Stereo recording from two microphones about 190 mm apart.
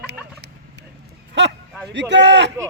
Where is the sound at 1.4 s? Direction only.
65° right (ahead or behind).